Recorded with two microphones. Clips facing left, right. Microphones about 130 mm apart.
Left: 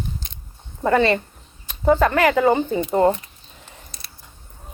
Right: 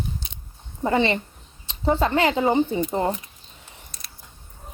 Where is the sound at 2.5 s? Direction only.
40° left (ahead or behind).